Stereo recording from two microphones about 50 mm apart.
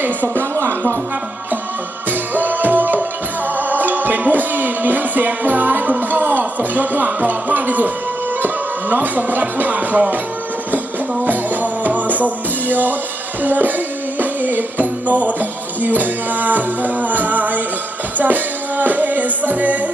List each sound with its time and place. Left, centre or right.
0.0 s speech: right
0.5 s music: right
2.0 s music: right
8.9 s music: right
11.3 s music: right